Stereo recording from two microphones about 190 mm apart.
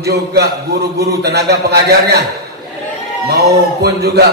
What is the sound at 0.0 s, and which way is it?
A man's voice, 55° right (ahead or behind).